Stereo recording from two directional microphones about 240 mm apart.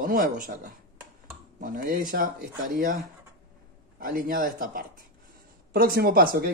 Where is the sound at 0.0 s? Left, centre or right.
Right.